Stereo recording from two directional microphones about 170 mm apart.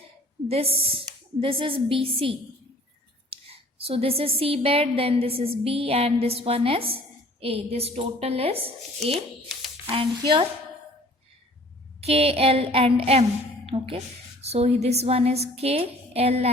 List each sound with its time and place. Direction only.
0.4 s a woman's voice: 35° right (ahead or behind)
3.2 s a sound: 35° right (ahead or behind)
4.4 s a woman's voice: 35° right (ahead or behind)
9.9 s a woman's voice: 30° right (ahead or behind)
11.9 s a woman's voice: 35° right (ahead or behind)